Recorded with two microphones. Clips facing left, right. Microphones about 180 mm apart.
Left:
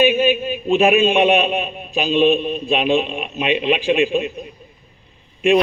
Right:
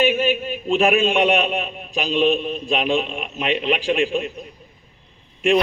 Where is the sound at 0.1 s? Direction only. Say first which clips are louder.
Left 3 dB; 15° left (ahead or behind).